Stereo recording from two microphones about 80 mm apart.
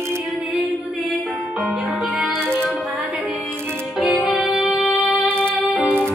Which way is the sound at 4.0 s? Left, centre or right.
Centre.